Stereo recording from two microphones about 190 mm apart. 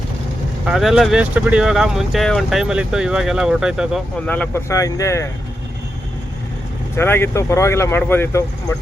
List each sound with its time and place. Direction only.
0.6 s speech: centre (ahead or behind)
4.3 s speech: 10° left (ahead or behind)
6.9 s speech: 10° left (ahead or behind)